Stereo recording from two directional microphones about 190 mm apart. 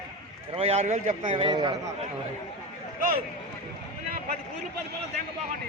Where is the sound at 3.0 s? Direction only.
50° right (ahead or behind).